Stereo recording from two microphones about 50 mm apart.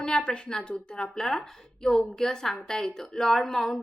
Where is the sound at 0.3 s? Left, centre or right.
Centre.